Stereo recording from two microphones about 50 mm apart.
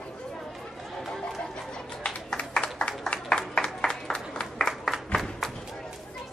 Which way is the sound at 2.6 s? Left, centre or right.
Left.